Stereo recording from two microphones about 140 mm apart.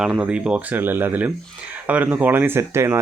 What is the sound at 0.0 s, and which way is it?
Speech, 5° right (ahead or behind).